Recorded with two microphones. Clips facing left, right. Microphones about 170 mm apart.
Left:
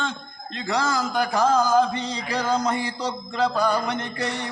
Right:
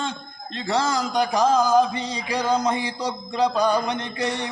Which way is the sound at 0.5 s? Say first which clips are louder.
Right 1 dB; 30° right (ahead or behind).